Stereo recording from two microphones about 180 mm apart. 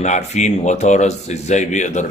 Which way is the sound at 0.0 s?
40° left (ahead or behind).